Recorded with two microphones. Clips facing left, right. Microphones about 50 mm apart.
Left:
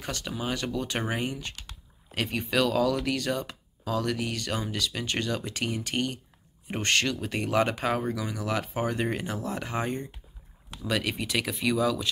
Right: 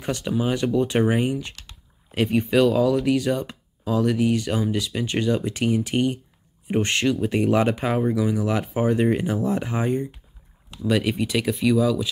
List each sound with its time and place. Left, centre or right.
0.0 s speech: right; by 12.1 s centre